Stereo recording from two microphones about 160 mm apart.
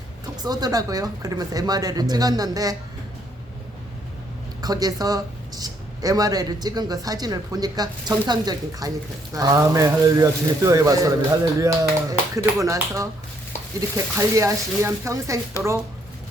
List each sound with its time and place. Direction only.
0.4 s speech: 25° right (ahead or behind)
4.6 s speech: 25° right (ahead or behind)